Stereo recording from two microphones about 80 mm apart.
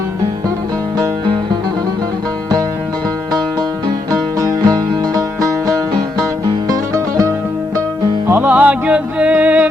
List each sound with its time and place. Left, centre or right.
4.1 s music: right
8.3 s music: right